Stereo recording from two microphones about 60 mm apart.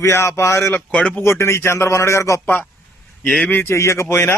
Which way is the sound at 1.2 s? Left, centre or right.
Left.